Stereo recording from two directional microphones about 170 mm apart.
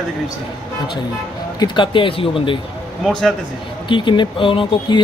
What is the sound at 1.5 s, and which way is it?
Speech, 25° left (ahead or behind).